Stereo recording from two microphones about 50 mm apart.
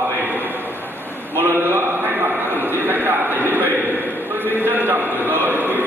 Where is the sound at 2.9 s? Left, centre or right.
Right.